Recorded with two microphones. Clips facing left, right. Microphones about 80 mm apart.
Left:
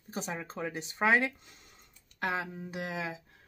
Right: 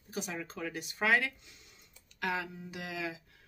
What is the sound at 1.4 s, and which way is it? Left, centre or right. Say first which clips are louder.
Speech: left 2 dB; left.